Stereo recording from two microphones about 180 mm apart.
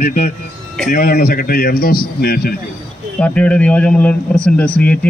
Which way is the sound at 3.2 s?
5° left (ahead or behind).